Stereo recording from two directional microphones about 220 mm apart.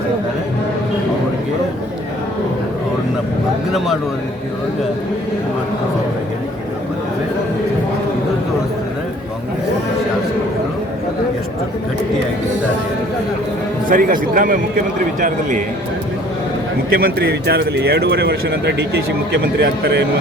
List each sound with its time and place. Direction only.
13.9 s a man's voice: 40° right (ahead or behind)
16.9 s speech: 45° right (ahead or behind)